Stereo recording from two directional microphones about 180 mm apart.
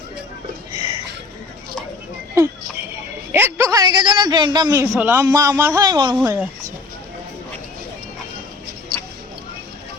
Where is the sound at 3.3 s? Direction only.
15° right (ahead or behind).